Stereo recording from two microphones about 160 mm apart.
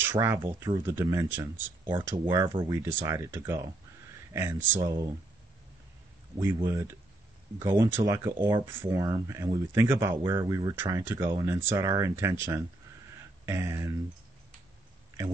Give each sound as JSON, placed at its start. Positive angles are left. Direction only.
{"t": 0.0, "sound": "speech", "side_deg": -15}
{"t": 2.1, "sound": "speech", "side_deg": -25}
{"t": 6.4, "sound": "speech", "side_deg": -20}